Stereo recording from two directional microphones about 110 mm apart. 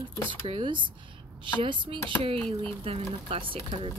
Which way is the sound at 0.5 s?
50° right (ahead or behind).